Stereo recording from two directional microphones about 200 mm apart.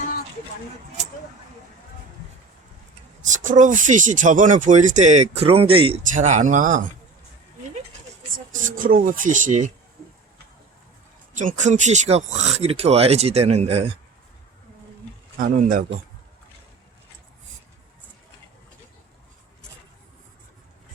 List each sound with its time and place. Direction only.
3.2 s speech: 40° right (ahead or behind)
6.1 s speech: 40° right (ahead or behind)
8.5 s speech: 40° right (ahead or behind)
11.3 s speech: 35° right (ahead or behind)
15.4 s speech: 40° right (ahead or behind)